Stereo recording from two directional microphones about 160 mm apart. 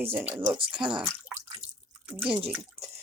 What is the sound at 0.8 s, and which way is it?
Speech, 30° right (ahead or behind).